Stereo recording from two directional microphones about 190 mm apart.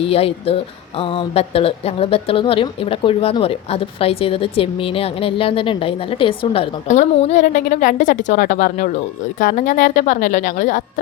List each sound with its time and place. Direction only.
0.0 s a woman's voice: 30° left (ahead or behind)